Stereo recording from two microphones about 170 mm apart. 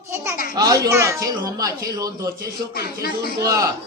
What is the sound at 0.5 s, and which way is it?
Speech, 20° right (ahead or behind).